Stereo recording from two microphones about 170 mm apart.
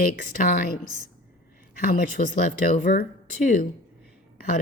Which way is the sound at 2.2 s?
40° left (ahead or behind).